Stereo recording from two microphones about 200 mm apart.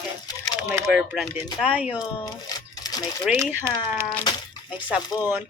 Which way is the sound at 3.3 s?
10° right (ahead or behind).